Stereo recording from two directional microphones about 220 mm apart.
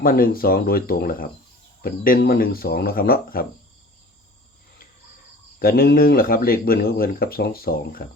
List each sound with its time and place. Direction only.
0.0 s speech: 40° left (ahead or behind)
5.5 s speech: 45° left (ahead or behind)